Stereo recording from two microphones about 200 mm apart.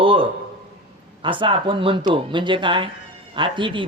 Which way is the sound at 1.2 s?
25° right (ahead or behind).